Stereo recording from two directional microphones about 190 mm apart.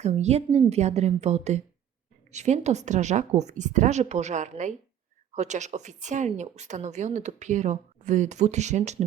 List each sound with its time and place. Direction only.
0.0 s a woman's voice: 35° right (ahead or behind)